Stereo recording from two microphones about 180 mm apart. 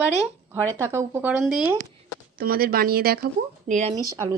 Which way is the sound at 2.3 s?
55° right (ahead or behind).